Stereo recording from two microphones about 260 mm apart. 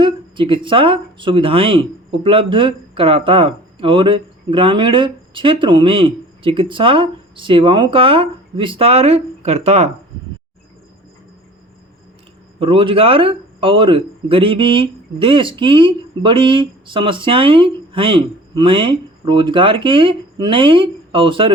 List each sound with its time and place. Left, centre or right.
0.0 s speech: centre
12.5 s speech: right